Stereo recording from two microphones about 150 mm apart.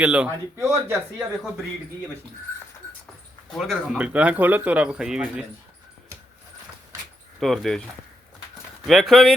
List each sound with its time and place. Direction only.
0.0 s speech: 5° right (ahead or behind)
0.5 s speech: 20° right (ahead or behind)
3.5 s speech: centre (ahead or behind)
7.3 s speech: centre (ahead or behind)
8.9 s speech: centre (ahead or behind)